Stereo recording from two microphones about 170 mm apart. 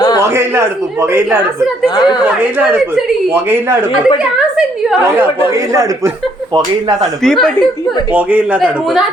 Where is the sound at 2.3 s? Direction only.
10° right (ahead or behind).